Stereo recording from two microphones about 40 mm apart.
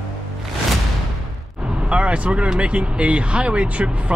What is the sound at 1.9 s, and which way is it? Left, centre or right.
Speech, right.